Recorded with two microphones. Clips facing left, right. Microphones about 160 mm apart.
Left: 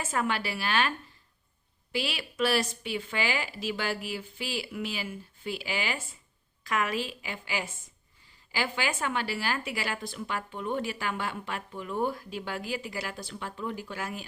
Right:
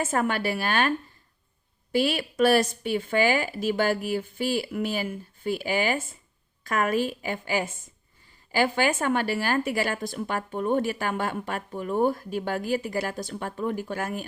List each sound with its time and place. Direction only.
0.0 s a woman's voice: 50° right (ahead or behind)